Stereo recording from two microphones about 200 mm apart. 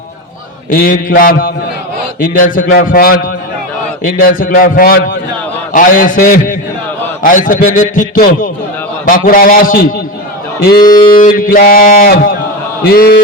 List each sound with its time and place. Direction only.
0.7 s a man's voice: 45° left (ahead or behind)
10.8 s mantra: 20° left (ahead or behind)
11.2 s a man's voice: 45° left (ahead or behind)